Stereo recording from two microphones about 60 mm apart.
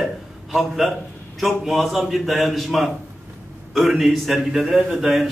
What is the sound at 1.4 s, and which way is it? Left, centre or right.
A man's voice, centre.